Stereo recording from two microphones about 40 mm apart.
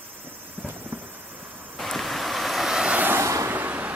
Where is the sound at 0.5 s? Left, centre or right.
Right.